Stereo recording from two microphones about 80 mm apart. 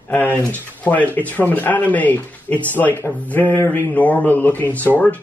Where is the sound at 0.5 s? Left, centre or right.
Centre.